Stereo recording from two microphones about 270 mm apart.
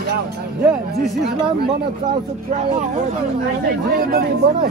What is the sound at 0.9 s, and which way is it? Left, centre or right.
Speech, right.